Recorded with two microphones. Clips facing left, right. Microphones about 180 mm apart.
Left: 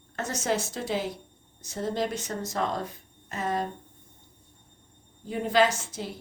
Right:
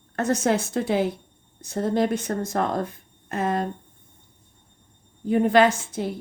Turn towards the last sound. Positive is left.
turn(degrees=-55)  # may be behind; listen again after turning